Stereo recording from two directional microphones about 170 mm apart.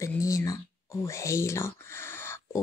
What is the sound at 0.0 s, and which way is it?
Speech, 20° left (ahead or behind).